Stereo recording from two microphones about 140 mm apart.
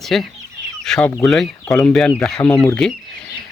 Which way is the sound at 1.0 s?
15° left (ahead or behind).